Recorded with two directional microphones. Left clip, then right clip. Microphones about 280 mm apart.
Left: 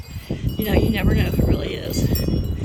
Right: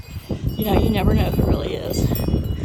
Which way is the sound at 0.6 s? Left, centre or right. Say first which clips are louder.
Right 1 dB; centre.